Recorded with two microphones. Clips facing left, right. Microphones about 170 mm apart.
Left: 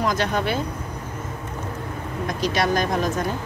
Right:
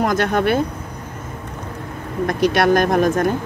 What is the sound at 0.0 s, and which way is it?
Speech, 55° right (ahead or behind).